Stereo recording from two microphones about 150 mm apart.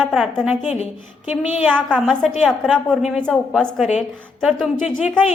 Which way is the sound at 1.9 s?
Centre (ahead or behind).